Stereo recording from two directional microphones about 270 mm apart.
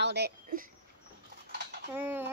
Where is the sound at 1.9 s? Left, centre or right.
Centre.